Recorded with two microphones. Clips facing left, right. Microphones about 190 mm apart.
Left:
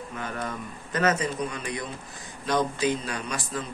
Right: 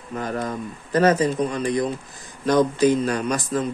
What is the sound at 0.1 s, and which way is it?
A man's voice, 40° right (ahead or behind).